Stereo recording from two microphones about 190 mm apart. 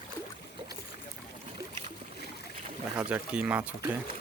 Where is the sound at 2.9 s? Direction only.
5° right (ahead or behind).